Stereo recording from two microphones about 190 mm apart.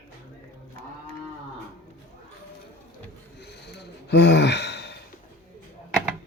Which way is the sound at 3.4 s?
60° left (ahead or behind).